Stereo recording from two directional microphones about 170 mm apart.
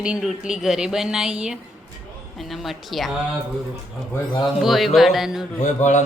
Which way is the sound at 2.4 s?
Centre (ahead or behind).